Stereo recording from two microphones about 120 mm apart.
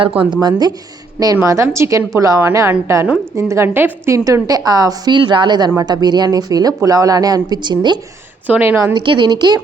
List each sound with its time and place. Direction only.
0.3 s a woman's voice: 35° right (ahead or behind)
1.4 s a woman's voice: 25° right (ahead or behind)
8.4 s a woman's voice: 15° right (ahead or behind)
8.8 s a woman's voice: 35° right (ahead or behind)